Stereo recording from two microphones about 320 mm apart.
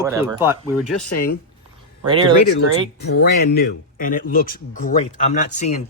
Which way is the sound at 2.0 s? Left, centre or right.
Centre.